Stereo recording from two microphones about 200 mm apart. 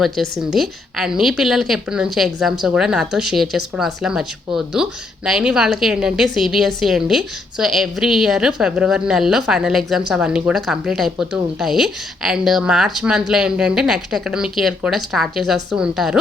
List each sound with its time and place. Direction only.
0.0 s a woman's voice: centre (ahead or behind)